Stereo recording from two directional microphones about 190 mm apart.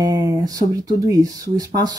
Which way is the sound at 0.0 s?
20° right (ahead or behind).